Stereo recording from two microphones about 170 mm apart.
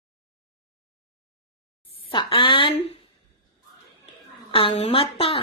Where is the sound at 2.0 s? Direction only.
30° left (ahead or behind).